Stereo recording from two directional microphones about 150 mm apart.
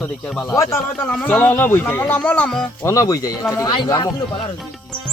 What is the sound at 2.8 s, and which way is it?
Speech, 20° left (ahead or behind).